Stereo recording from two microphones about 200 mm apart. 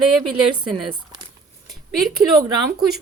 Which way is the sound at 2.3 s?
20° right (ahead or behind).